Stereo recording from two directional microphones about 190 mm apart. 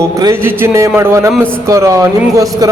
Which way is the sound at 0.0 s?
20° right (ahead or behind).